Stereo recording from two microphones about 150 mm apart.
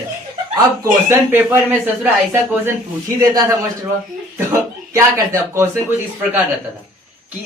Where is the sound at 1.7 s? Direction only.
10° right (ahead or behind).